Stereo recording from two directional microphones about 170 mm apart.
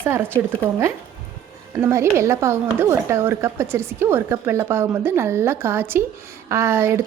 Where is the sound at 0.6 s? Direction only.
15° right (ahead or behind).